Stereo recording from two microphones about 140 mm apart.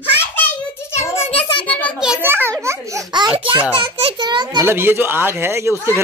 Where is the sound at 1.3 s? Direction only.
40° left (ahead or behind).